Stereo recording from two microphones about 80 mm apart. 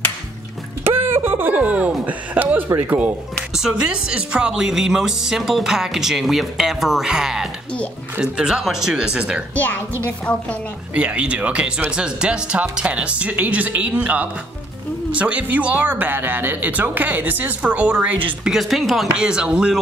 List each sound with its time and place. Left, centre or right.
0.8 s speech: right
3.5 s speech: centre
11.0 s speech: centre
18.5 s speech: centre